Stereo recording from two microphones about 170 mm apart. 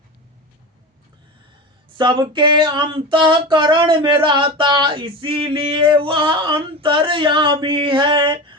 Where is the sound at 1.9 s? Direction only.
30° right (ahead or behind).